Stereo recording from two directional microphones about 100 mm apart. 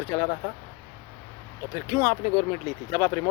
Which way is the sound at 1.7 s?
40° left (ahead or behind).